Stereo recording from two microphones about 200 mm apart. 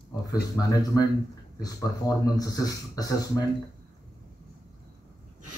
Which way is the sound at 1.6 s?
15° left (ahead or behind).